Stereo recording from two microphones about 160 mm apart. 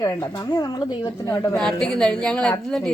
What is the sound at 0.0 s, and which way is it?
Speech, 25° left (ahead or behind).